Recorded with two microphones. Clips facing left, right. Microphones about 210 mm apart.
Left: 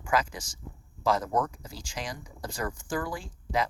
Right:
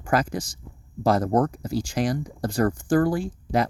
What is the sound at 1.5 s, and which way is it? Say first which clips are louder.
Speech: right 16 dB; 60° right (ahead or behind).